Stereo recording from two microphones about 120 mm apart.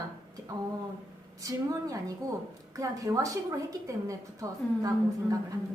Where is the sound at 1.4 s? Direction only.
30° right (ahead or behind).